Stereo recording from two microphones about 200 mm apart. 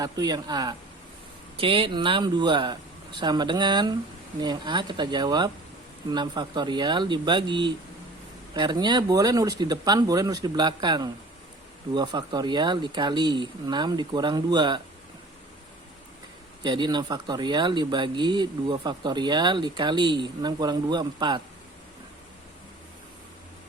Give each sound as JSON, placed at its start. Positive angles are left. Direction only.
{"t": 0.0, "sound": "speech", "side_deg": -20}
{"t": 16.6, "sound": "speech", "side_deg": -20}